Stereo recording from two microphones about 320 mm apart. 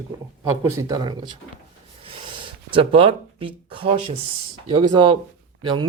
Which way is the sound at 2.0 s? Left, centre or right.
Centre.